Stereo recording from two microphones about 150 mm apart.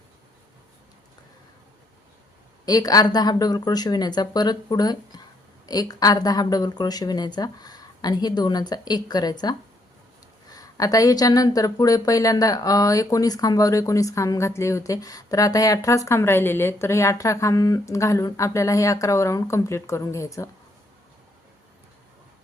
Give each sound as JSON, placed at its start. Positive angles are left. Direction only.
{"t": 2.6, "sound": "speech", "side_deg": 25}